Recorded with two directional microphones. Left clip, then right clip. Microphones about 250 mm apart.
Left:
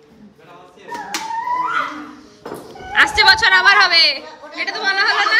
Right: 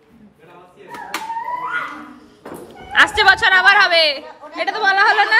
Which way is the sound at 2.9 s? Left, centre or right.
Centre.